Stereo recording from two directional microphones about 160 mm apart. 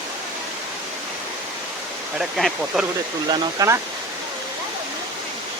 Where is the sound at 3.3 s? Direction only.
25° right (ahead or behind).